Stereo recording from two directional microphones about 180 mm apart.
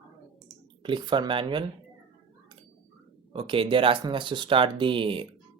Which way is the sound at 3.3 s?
30° right (ahead or behind).